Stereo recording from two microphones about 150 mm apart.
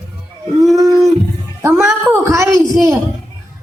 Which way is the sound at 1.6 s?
20° right (ahead or behind).